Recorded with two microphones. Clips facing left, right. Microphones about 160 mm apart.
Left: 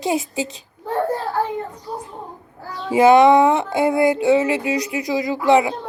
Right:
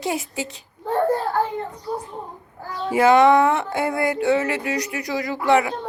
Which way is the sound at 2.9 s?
15° left (ahead or behind).